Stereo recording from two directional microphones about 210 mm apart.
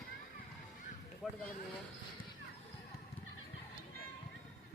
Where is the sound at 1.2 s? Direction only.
Centre (ahead or behind).